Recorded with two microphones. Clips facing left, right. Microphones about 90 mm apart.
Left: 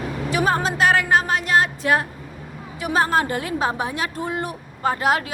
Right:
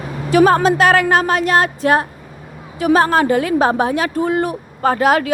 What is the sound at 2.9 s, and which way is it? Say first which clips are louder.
A woman's voice: right 7 dB; 70° right (ahead or behind).